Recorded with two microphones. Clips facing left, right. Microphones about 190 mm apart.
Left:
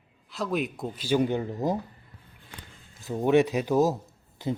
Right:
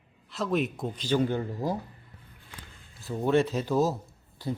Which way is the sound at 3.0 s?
20° left (ahead or behind).